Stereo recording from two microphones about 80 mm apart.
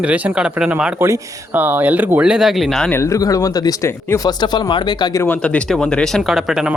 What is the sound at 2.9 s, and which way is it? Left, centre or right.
Speech, left.